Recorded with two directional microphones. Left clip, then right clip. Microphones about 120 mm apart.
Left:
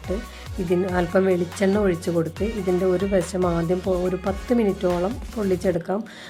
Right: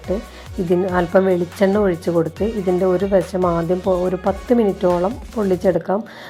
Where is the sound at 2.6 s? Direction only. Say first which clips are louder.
Right 4 dB; 15° left (ahead or behind).